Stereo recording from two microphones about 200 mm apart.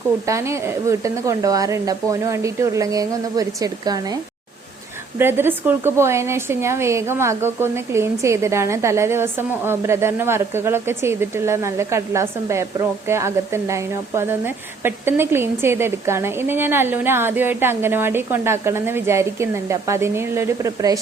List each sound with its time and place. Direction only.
0.3 s a woman's voice: 15° right (ahead or behind)